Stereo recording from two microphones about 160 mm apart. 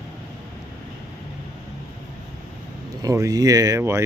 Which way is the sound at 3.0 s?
20° right (ahead or behind).